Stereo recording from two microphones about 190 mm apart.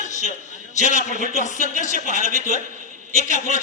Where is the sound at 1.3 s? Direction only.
40° left (ahead or behind).